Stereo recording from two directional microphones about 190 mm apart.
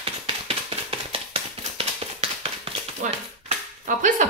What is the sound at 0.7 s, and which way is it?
Tap, 30° right (ahead or behind).